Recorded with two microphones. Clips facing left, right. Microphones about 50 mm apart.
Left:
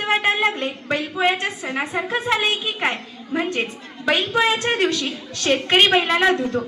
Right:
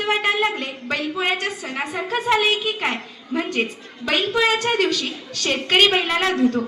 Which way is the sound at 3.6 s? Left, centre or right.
Centre.